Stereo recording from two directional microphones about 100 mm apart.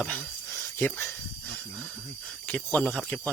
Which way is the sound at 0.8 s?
25° left (ahead or behind).